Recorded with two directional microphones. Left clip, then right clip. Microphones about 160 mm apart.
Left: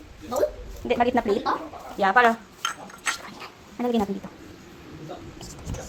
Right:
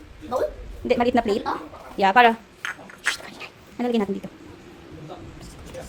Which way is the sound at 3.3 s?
20° right (ahead or behind).